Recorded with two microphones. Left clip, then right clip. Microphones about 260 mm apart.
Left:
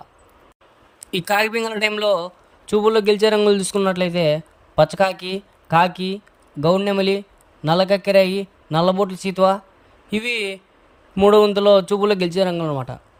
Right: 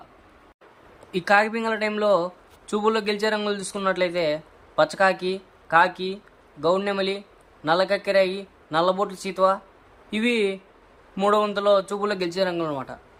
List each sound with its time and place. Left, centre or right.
1.4 s a man's voice: left